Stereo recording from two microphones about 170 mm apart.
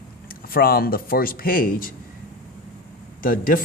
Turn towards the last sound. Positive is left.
turn(degrees=55)  # may be behind; listen again after turning